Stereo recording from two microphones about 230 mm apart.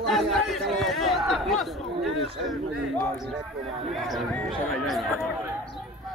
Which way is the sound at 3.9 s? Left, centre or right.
Centre.